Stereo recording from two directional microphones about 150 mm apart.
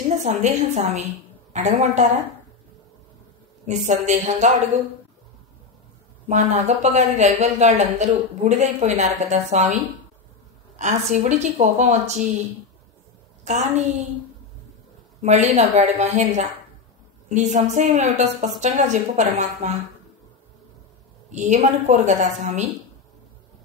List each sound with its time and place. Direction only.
0.2 s speech: 50° right (ahead or behind)
3.6 s speech: 50° right (ahead or behind)
6.2 s speech: 50° right (ahead or behind)
10.8 s speech: 50° right (ahead or behind)
13.4 s a sound: 50° right (ahead or behind)
15.2 s speech: 50° right (ahead or behind)
21.3 s speech: 55° right (ahead or behind)